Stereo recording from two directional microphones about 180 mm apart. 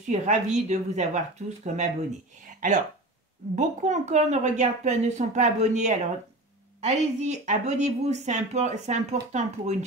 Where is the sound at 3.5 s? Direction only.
40° right (ahead or behind).